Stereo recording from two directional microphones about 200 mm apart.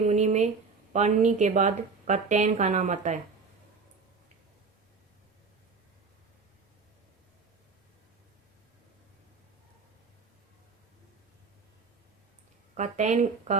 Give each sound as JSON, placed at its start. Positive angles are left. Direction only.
{"t": 0.1, "sound": "a woman's voice", "side_deg": -35}
{"t": 12.7, "sound": "a woman's voice", "side_deg": -35}